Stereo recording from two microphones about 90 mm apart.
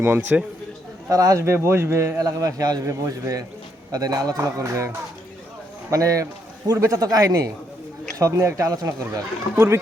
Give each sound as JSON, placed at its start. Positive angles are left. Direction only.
{"t": 0.0, "sound": "a man's voice", "side_deg": -25}
{"t": 1.1, "sound": "a man's voice", "side_deg": -35}
{"t": 5.9, "sound": "a man's voice", "side_deg": -40}